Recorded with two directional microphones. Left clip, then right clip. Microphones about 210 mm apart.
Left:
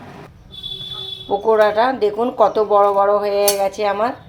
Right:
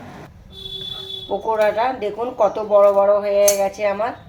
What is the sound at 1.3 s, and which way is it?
Speech, 50° left (ahead or behind).